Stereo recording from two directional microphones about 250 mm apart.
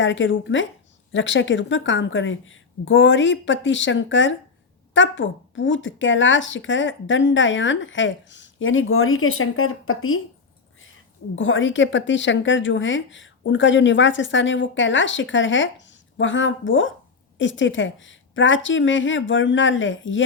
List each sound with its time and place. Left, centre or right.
0.0 s speech: left
11.3 s speech: left